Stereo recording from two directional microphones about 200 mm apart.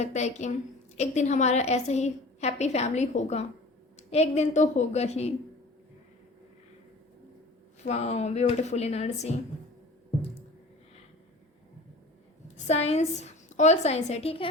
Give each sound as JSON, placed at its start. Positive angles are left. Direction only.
{"t": 0.0, "sound": "a woman's voice", "side_deg": 35}
{"t": 7.9, "sound": "a woman's voice", "side_deg": 35}
{"t": 12.6, "sound": "a woman's voice", "side_deg": 30}